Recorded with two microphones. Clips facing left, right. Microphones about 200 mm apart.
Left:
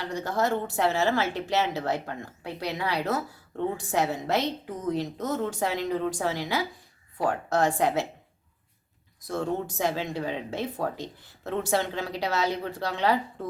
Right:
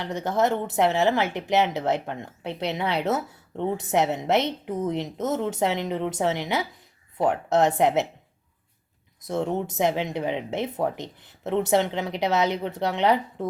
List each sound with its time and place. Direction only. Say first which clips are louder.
0.0 s speech: right 4 dB; 20° right (ahead or behind)
9.2 s speech: right 3 dB; 20° right (ahead or behind)